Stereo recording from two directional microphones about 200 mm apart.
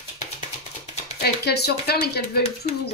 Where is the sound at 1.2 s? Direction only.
55° left (ahead or behind).